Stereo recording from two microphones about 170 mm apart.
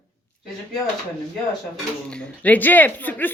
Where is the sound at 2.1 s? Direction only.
5° left (ahead or behind).